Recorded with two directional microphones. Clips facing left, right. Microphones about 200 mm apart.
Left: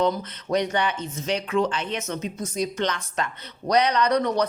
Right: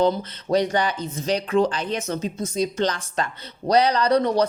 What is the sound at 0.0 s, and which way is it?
Speech, 30° right (ahead or behind).